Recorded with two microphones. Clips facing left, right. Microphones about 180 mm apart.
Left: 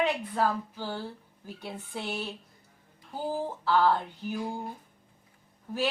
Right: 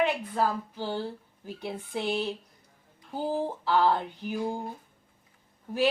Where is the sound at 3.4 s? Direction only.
15° right (ahead or behind).